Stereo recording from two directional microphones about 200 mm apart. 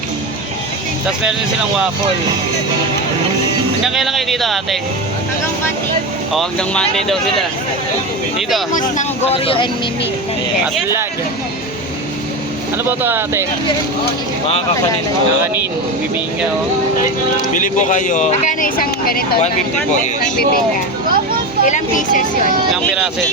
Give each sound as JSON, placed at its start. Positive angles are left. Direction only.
{"t": 3.8, "sound": "speech", "side_deg": 0}
{"t": 6.3, "sound": "speech", "side_deg": 5}
{"t": 8.4, "sound": "speech", "side_deg": 0}
{"t": 8.7, "sound": "speech", "side_deg": 35}
{"t": 12.7, "sound": "speech", "side_deg": -10}
{"t": 17.5, "sound": "speech", "side_deg": 40}
{"t": 21.6, "sound": "speech", "side_deg": 40}
{"t": 22.7, "sound": "speech", "side_deg": 0}